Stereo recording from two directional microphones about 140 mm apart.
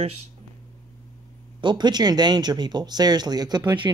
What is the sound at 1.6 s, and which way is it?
Speech, 30° right (ahead or behind).